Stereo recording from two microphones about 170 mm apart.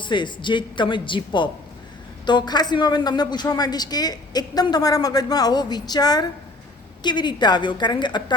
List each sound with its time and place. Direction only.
0.0 s speech: 25° left (ahead or behind)